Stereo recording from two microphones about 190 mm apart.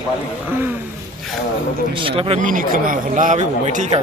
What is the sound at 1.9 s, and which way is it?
Speech, 30° right (ahead or behind).